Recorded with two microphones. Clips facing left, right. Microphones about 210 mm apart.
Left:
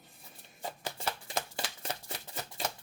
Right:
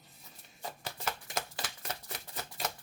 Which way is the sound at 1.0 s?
30° left (ahead or behind).